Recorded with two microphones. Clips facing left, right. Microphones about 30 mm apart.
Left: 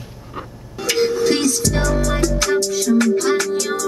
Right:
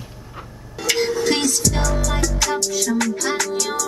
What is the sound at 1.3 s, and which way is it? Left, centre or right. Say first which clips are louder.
Music: left 2 dB; centre.